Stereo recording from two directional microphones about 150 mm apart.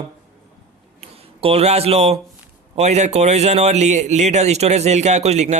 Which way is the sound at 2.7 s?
50° right (ahead or behind).